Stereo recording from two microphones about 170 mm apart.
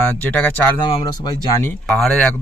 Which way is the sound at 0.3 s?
10° left (ahead or behind).